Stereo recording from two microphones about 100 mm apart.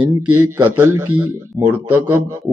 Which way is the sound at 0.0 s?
15° right (ahead or behind).